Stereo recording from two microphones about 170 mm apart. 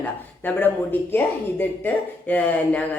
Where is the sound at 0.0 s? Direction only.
10° left (ahead or behind).